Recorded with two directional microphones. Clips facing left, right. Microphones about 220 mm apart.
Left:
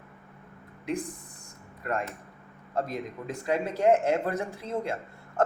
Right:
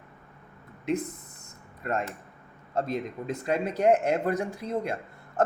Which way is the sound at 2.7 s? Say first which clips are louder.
Right 2 dB; 25° right (ahead or behind).